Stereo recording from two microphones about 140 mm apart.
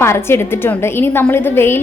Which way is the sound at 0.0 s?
20° left (ahead or behind).